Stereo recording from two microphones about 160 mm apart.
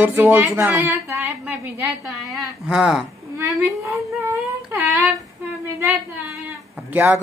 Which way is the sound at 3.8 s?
20° right (ahead or behind).